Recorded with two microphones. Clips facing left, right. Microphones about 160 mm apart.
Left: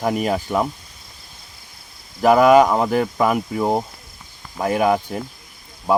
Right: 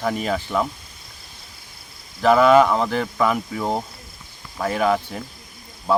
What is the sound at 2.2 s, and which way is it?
Speech, 10° left (ahead or behind).